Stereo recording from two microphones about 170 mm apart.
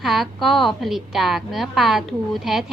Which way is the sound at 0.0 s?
Centre (ahead or behind).